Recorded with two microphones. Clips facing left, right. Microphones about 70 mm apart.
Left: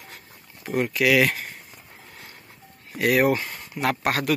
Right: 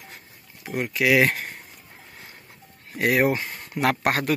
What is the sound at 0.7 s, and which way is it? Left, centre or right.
Speech, centre.